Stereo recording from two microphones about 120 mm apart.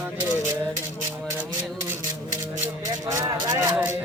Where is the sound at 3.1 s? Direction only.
30° right (ahead or behind).